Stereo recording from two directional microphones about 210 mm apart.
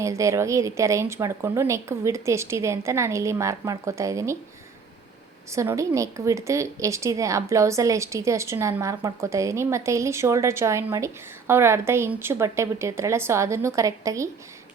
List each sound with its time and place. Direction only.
0.0 s a woman's voice: 15° right (ahead or behind)
5.5 s a woman's voice: 15° right (ahead or behind)